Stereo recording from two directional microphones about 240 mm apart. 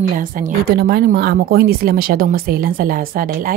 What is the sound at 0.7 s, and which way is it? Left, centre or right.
Speech, right.